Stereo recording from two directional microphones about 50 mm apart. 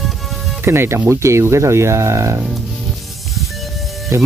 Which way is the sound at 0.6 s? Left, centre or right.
Right.